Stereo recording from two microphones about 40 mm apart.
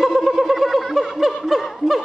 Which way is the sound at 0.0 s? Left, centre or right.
Centre.